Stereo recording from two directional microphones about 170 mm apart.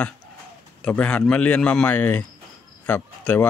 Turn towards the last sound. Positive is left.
turn(degrees=10)  # may be behind; listen again after turning